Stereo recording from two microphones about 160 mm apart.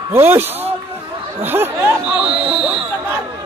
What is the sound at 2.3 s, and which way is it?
Speech, 35° right (ahead or behind).